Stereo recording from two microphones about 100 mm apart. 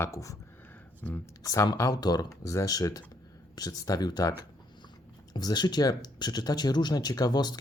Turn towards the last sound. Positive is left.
turn(degrees=45)  # may be behind; listen again after turning